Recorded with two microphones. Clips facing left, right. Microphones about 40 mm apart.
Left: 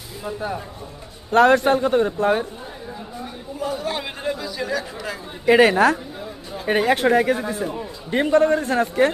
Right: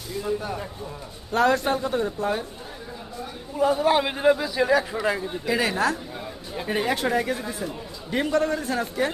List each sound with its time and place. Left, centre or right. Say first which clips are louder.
0.3 s a man's voice: left 3 dB; left
1.3 s a man's voice: left 6 dB; left
3.6 s a man's voice: right 6 dB; centre
5.5 s a woman's voice: left 9 dB; left
7.3 s a man's voice: left 6 dB; centre; by 9.1 s left